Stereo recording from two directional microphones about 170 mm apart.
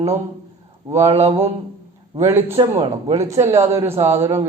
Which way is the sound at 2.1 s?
15° right (ahead or behind).